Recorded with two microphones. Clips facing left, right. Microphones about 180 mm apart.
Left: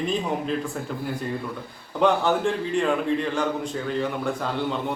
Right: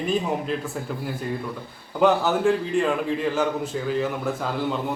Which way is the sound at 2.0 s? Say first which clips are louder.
Right 1 dB; 5° right (ahead or behind).